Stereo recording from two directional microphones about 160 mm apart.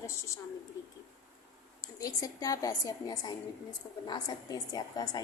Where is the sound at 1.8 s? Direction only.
20° left (ahead or behind).